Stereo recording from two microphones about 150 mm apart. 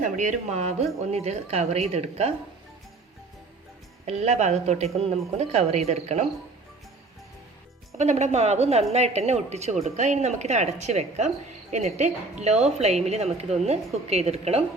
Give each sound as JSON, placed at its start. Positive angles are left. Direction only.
{"t": 0.0, "sound": "a woman's voice", "side_deg": -55}
{"t": 4.0, "sound": "a woman's voice", "side_deg": -45}
{"t": 7.9, "sound": "a woman's voice", "side_deg": -50}